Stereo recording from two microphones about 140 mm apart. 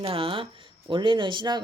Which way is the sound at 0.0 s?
40° right (ahead or behind).